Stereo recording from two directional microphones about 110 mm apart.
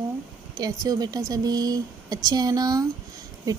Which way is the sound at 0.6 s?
35° right (ahead or behind).